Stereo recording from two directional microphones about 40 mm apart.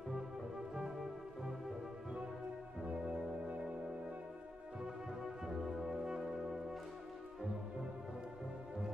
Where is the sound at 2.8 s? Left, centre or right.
Right.